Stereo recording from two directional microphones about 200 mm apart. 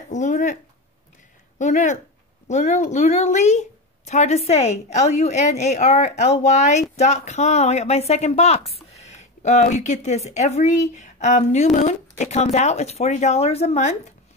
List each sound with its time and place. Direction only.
0.1 s a woman's voice: 35° left (ahead or behind)
1.6 s a woman's voice: 35° left (ahead or behind)